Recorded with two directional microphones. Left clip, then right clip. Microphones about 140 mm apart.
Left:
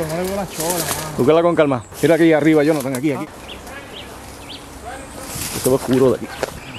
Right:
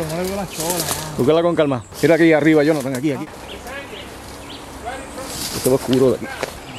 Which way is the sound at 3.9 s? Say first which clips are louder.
Right 1 dB; 15° left (ahead or behind).